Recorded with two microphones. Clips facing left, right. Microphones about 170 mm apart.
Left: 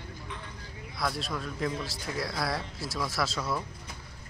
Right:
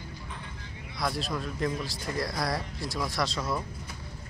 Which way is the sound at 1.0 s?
Centre (ahead or behind).